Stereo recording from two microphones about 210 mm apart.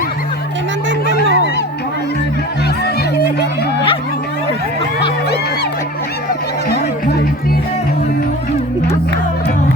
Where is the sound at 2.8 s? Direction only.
50° left (ahead or behind).